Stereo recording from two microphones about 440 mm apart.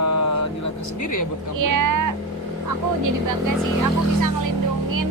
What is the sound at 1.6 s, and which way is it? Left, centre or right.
Speech, right.